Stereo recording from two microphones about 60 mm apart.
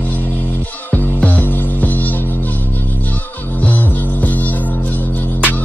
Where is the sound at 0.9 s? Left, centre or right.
Left.